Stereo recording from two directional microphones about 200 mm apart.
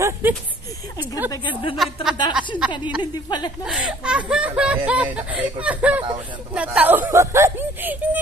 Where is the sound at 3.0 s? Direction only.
20° left (ahead or behind).